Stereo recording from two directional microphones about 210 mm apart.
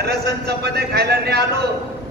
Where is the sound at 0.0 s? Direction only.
50° right (ahead or behind).